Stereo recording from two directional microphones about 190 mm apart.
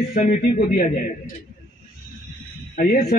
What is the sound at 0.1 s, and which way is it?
Speech, 50° left (ahead or behind).